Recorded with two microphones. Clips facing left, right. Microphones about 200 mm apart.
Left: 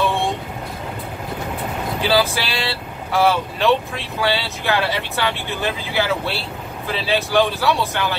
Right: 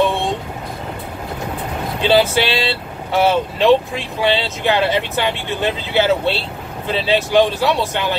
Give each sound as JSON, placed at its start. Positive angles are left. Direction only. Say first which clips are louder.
{"t": 0.0, "sound": "vehicle", "louder": "right 3 dB", "side_deg": -20}
{"t": 2.0, "sound": "speech", "louder": "right 5 dB", "side_deg": -25}